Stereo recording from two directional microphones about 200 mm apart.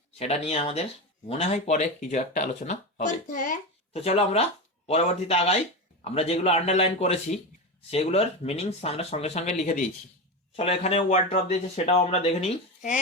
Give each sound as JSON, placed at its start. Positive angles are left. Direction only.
{"t": 0.2, "sound": "speech", "side_deg": 35}
{"t": 3.9, "sound": "speech", "side_deg": 30}